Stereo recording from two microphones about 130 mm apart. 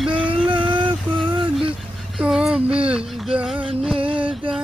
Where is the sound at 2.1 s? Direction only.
5° right (ahead or behind).